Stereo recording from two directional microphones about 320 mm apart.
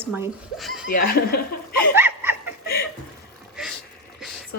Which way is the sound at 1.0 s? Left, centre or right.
Left.